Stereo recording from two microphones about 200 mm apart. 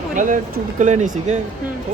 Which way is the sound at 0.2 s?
40° right (ahead or behind).